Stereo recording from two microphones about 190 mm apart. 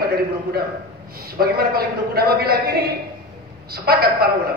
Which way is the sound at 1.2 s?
50° right (ahead or behind).